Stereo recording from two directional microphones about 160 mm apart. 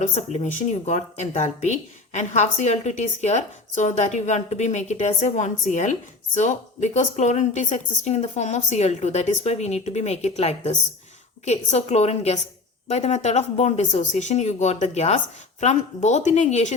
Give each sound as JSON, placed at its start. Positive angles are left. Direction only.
{"t": 0.0, "sound": "speech", "side_deg": 45}